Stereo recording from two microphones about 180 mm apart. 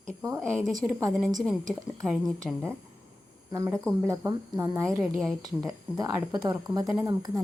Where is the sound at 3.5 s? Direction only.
20° right (ahead or behind).